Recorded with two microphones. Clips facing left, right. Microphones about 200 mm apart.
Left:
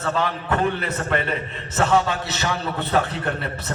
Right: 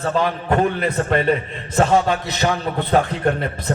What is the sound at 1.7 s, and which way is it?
Speech, 15° right (ahead or behind).